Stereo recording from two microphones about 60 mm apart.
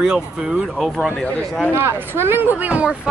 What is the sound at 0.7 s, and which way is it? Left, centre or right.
Speech, centre.